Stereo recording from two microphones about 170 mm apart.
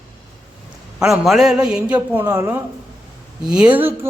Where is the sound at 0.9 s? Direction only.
Centre (ahead or behind).